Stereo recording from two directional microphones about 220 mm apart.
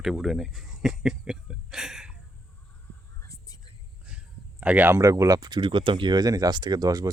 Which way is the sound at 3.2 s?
15° left (ahead or behind).